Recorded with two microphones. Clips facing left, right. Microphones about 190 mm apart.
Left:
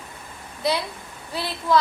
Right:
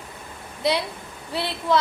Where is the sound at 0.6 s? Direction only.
25° right (ahead or behind).